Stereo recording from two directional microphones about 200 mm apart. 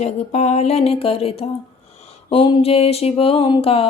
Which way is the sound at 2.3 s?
30° left (ahead or behind).